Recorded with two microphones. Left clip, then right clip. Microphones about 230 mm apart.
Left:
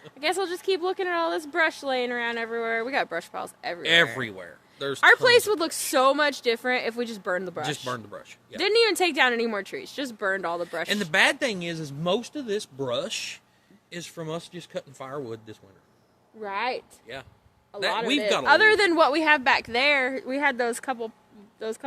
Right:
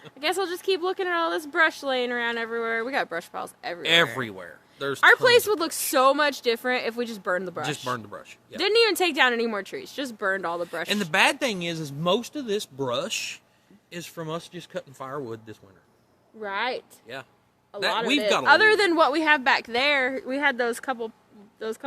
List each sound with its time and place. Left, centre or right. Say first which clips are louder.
0.0 s speech: even; centre
3.8 s speech: even; centre
4.9 s speech: even; centre
7.9 s speech: right 2 dB; centre
8.5 s speech: right 1 dB; centre
10.8 s speech: even; centre
16.4 s speech: right 1 dB; centre
17.1 s speech: right 1 dB; centre
17.7 s speech: right 1 dB; centre